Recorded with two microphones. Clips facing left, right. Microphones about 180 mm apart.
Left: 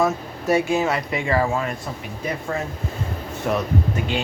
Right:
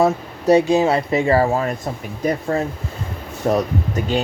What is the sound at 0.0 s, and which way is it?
Speech, 35° right (ahead or behind).